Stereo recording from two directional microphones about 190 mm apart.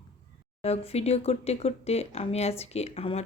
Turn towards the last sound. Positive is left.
turn(degrees=30)  # may be behind; listen again after turning